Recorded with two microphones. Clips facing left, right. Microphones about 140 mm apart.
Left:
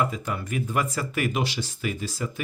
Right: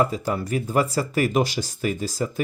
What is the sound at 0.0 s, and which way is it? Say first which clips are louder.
Speech: right 5 dB; 35° right (ahead or behind).